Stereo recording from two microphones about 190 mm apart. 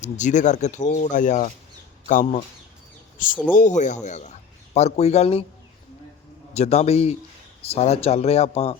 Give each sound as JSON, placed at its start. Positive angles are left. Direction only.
{"t": 0.0, "sound": "speech", "side_deg": 40}
{"t": 6.5, "sound": "speech", "side_deg": 35}